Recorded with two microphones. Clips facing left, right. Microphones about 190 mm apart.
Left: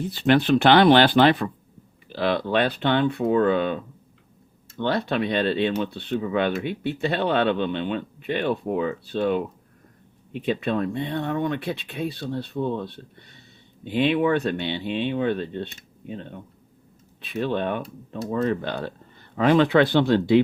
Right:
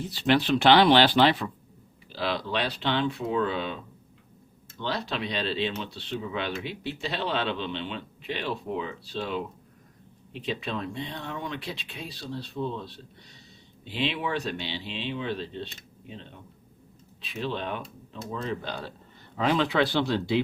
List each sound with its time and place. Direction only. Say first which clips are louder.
0.0 s speech: left 4 dB; 55° left (ahead or behind)
4.8 s speech: left 8 dB; 55° left (ahead or behind)